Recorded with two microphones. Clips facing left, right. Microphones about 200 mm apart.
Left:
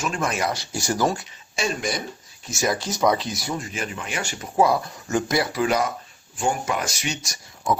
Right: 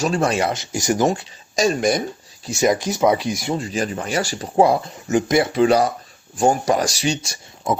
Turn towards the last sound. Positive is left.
turn(degrees=-30)  # may be behind; listen again after turning